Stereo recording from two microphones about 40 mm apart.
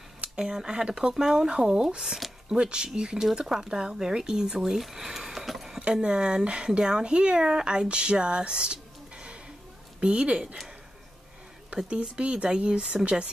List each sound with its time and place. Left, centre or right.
0.4 s speech: centre
5.9 s speech: right
11.7 s speech: right